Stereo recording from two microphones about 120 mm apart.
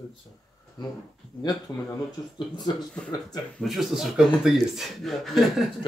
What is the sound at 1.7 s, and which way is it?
Speech, 25° left (ahead or behind).